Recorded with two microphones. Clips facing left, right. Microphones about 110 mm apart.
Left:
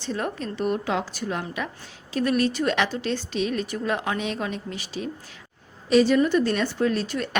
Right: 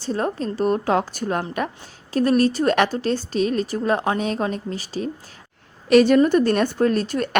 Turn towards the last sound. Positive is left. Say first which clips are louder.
# right 5 dB
turn(degrees=-45)  # may be behind; listen again after turning